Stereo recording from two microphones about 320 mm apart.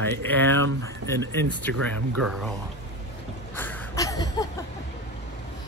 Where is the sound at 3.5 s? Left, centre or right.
Centre.